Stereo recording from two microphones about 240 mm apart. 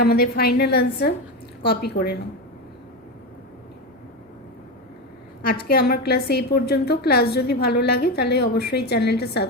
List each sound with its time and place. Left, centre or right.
0.0 s a woman's voice: left
5.6 s a woman's voice: left